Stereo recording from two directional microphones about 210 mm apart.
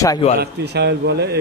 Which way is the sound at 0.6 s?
55° right (ahead or behind).